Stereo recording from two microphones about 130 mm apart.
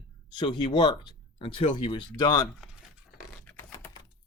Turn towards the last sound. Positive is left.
turn(degrees=15)  # may be behind; listen again after turning